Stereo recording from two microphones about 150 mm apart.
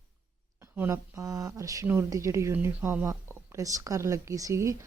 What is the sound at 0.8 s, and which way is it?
Speech, 20° right (ahead or behind).